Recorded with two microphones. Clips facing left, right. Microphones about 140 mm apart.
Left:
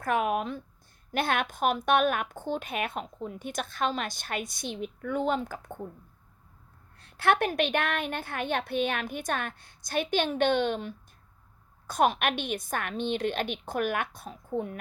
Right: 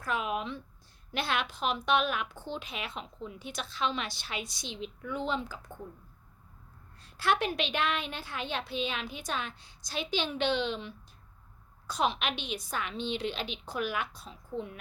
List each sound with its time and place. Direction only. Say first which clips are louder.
0.0 s a woman's voice: left 6 dB; 55° left (ahead or behind)
7.0 s a woman's voice: left 4 dB; 55° left (ahead or behind)